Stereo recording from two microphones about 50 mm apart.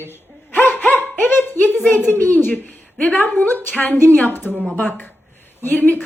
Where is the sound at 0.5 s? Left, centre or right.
Left.